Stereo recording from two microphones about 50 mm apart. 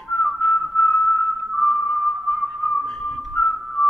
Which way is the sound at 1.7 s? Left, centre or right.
Centre.